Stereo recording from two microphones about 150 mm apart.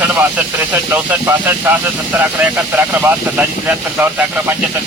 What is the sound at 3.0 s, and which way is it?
Speech, 10° right (ahead or behind).